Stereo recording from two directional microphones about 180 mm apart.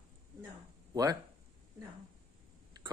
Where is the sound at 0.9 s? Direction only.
20° right (ahead or behind).